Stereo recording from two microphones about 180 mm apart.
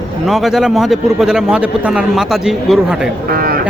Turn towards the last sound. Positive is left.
turn(degrees=-55)  # may be behind; listen again after turning